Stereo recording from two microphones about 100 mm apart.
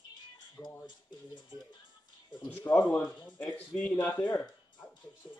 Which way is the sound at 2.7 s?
25° left (ahead or behind).